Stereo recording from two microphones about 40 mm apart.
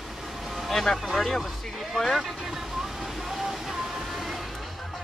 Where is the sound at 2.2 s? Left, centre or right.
Centre.